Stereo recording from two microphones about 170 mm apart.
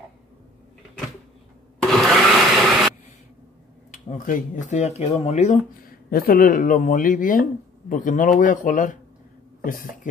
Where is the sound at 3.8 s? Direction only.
50° left (ahead or behind).